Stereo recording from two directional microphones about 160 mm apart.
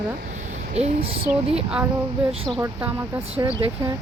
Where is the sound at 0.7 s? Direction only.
40° right (ahead or behind).